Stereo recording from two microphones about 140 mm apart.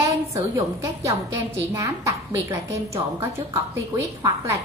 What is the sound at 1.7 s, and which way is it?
A woman's voice, 20° right (ahead or behind).